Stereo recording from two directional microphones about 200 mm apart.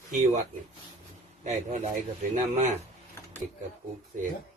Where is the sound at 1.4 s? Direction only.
40° right (ahead or behind).